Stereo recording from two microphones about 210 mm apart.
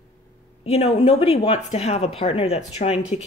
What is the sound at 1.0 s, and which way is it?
Speech, 25° left (ahead or behind).